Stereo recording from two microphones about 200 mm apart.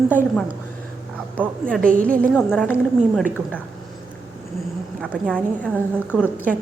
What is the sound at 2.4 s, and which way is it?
Speech, 5° left (ahead or behind).